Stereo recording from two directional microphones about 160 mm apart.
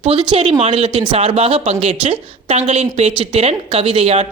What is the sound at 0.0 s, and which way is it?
Speech, 35° right (ahead or behind).